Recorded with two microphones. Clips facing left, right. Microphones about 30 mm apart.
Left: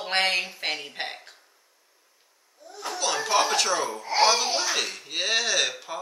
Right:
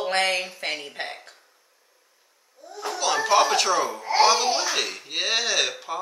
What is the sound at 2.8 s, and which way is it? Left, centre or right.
A man's voice, centre.